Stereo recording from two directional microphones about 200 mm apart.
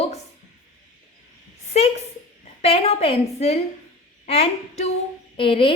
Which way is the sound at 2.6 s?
30° left (ahead or behind).